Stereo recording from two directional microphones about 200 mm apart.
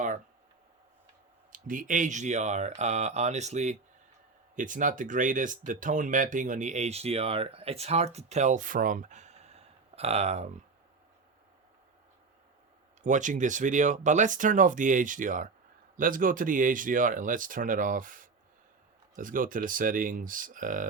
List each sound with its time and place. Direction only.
1.5 s speech: 45° right (ahead or behind)
13.0 s speech: 40° right (ahead or behind)